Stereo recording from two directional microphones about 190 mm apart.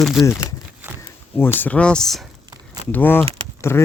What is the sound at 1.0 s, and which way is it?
Speech, 10° left (ahead or behind).